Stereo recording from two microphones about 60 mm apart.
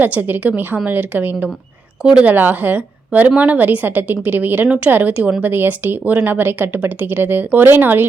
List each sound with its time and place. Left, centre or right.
0.0 s a woman's voice: right
2.0 s a woman's voice: centre
2.3 s a woman's voice: right